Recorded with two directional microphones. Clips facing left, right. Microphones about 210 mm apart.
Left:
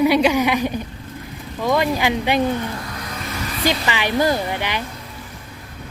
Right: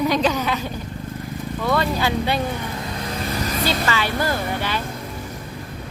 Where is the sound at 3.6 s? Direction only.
15° left (ahead or behind).